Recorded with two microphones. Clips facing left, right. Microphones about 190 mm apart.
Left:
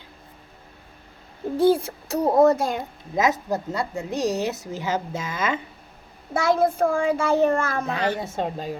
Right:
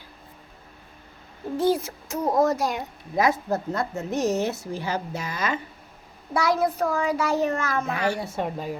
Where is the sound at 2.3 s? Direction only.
60° left (ahead or behind).